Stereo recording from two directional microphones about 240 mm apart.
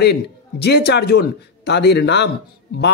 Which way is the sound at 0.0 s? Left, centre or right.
Left.